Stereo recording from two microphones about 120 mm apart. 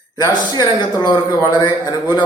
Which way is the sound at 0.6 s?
35° left (ahead or behind).